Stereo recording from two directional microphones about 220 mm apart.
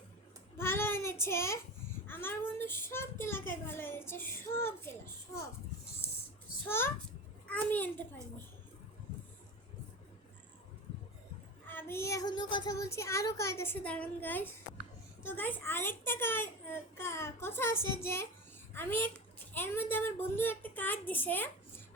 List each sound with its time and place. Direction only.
0.5 s a child's voice: 10° left (ahead or behind)
6.7 s a child's voice: 10° left (ahead or behind)
11.7 s a child's voice: 10° left (ahead or behind)